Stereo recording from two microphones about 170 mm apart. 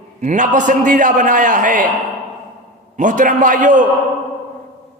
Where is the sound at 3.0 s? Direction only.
50° right (ahead or behind).